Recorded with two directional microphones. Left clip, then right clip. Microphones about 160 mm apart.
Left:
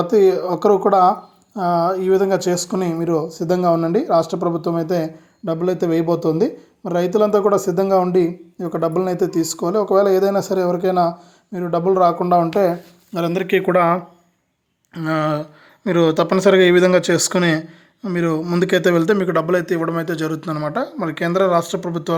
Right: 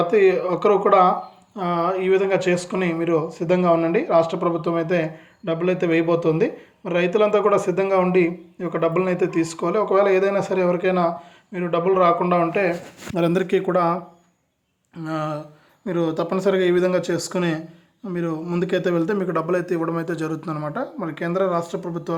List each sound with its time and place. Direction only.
0.0 s speech: centre (ahead or behind)
0.9 s speech: 25° left (ahead or behind)
13.1 s speech: 25° right (ahead or behind)
13.7 s speech: 20° left (ahead or behind)